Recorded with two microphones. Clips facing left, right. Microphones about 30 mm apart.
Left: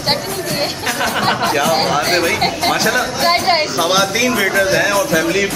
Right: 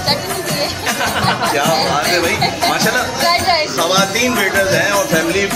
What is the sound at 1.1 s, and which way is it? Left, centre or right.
Music, centre.